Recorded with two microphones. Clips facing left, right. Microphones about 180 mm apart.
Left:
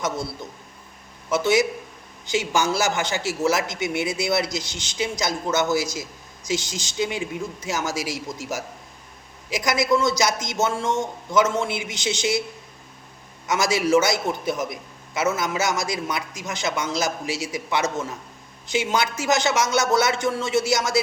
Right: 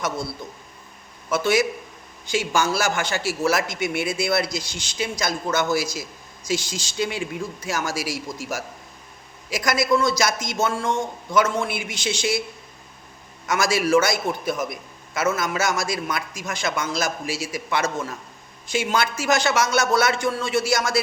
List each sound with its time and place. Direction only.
1.3 s a man's voice: 20° left (ahead or behind)
13.5 s a man's voice: 20° left (ahead or behind)